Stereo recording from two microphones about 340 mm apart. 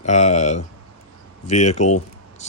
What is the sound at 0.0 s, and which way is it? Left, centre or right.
Speech, centre.